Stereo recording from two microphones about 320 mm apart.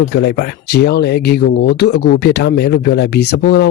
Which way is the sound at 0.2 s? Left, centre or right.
Left.